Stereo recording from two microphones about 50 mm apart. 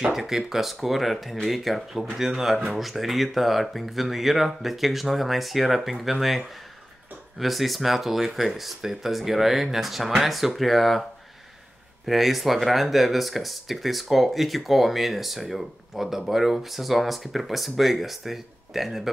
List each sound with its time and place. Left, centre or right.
0.0 s speech: centre
12.1 s speech: centre